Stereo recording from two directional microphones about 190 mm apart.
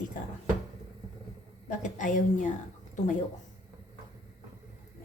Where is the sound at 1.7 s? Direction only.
40° left (ahead or behind).